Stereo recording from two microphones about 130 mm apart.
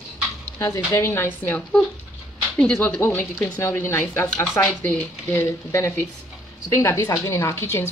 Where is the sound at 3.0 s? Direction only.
15° left (ahead or behind).